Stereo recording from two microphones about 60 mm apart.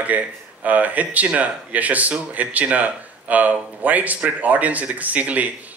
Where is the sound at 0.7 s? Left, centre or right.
Right.